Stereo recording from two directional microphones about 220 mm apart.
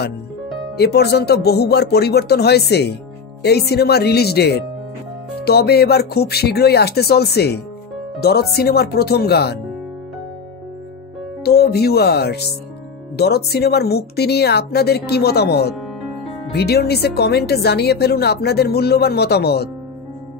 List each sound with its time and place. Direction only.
0.7 s a woman's voice: 45° left (ahead or behind)
11.4 s a woman's voice: 45° left (ahead or behind)
15.7 s music: centre (ahead or behind)
16.5 s a woman's voice: 45° left (ahead or behind)